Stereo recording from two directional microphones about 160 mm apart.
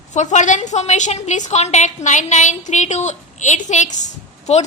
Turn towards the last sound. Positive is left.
turn(degrees=45)  # may be behind; listen again after turning